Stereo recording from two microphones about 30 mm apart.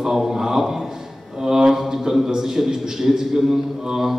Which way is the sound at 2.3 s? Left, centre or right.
Centre.